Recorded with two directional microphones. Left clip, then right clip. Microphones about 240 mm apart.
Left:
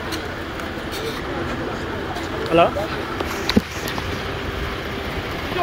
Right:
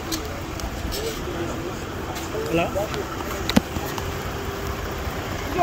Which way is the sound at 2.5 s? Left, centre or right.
Centre.